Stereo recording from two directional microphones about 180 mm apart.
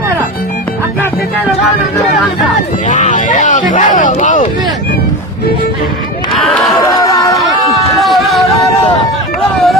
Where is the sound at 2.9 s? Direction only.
45° left (ahead or behind).